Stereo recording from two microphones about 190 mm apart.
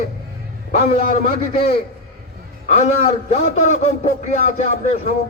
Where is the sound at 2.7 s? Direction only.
35° left (ahead or behind).